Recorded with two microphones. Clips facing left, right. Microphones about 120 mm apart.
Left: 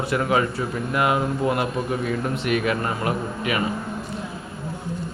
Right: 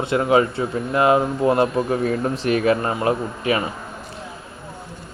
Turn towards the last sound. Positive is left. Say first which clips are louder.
# right 4 dB
turn(degrees=-30)  # may be behind; listen again after turning